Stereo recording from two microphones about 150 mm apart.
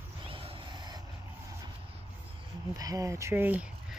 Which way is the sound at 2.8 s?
20° right (ahead or behind).